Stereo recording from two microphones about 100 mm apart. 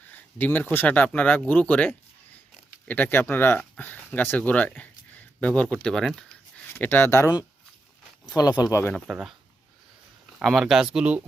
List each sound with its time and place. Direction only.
0.1 s speech: 20° left (ahead or behind)
6.7 s speech: 20° left (ahead or behind)
8.4 s speech: 40° left (ahead or behind)
9.1 s speech: centre (ahead or behind)
10.4 s speech: centre (ahead or behind)